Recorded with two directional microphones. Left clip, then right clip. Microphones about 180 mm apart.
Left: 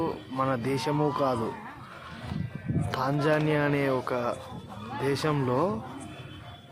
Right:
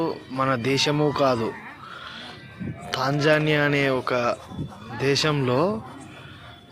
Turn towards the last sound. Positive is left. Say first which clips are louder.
# right 4 dB
turn(degrees=-15)  # may be behind; listen again after turning